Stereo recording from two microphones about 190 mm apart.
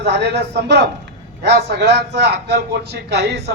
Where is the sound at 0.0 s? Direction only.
60° right (ahead or behind).